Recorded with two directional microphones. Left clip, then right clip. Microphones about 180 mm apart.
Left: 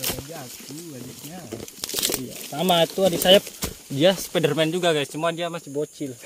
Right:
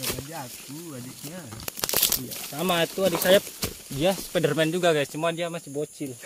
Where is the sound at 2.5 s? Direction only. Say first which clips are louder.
Left 5 dB; 35° left (ahead or behind).